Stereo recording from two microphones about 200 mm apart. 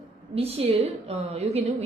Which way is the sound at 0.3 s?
30° right (ahead or behind).